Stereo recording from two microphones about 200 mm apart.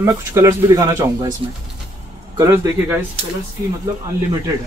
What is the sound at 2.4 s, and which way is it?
Speech, 15° right (ahead or behind).